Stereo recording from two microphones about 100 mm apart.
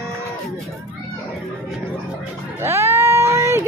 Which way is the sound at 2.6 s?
25° right (ahead or behind).